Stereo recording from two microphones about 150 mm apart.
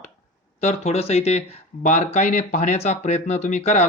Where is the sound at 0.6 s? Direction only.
45° left (ahead or behind).